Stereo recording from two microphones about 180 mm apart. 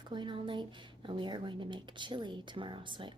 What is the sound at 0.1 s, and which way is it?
Speech, 25° right (ahead or behind).